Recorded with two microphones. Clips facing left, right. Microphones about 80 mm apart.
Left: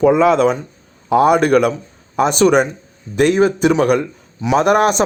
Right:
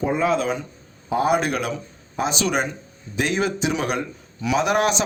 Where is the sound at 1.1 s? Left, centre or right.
Left.